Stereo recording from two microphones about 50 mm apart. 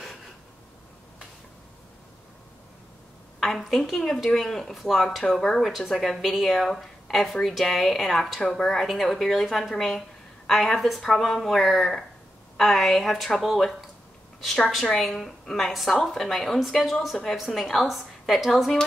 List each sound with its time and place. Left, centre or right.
3.3 s speech: centre
14.9 s speech: centre